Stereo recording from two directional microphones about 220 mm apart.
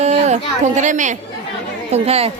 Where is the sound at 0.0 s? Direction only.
30° right (ahead or behind).